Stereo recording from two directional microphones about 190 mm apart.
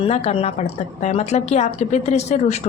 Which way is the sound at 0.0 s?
30° left (ahead or behind).